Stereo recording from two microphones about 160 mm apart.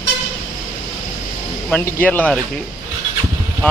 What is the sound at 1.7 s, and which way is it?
Speech, 10° left (ahead or behind).